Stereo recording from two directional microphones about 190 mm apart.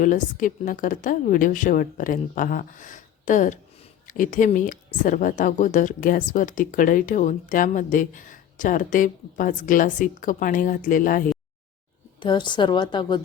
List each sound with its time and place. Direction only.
0.0 s speech: 45° left (ahead or behind)
12.2 s a woman's voice: 25° left (ahead or behind)